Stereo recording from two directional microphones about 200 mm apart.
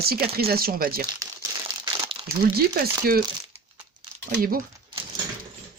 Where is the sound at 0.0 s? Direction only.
50° right (ahead or behind).